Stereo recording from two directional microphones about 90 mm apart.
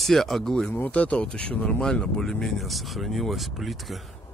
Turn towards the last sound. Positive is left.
turn(degrees=0)  # may be behind; listen again after turning